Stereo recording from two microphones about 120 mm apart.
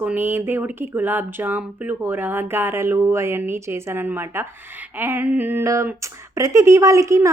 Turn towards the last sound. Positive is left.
turn(degrees=-25)  # may be behind; listen again after turning